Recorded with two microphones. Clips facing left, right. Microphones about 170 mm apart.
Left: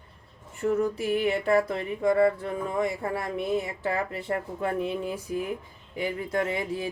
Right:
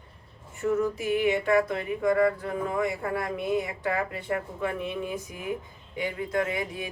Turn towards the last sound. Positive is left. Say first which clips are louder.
# left 1 dB
turn(degrees=30)  # may be behind; listen again after turning